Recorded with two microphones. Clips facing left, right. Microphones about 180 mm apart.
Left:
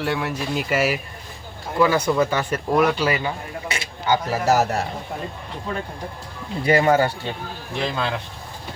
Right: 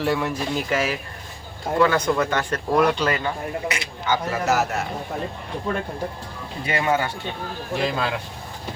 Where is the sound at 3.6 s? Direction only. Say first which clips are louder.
Left 1 dB; 30° left (ahead or behind).